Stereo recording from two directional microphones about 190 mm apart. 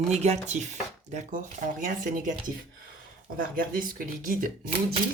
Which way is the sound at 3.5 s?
45° right (ahead or behind).